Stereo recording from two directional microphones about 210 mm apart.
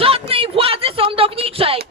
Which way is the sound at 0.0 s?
25° right (ahead or behind).